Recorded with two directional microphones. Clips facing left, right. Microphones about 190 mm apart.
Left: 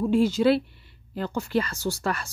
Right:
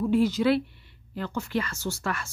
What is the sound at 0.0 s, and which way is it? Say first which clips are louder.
Speech: left 2 dB; 25° left (ahead or behind).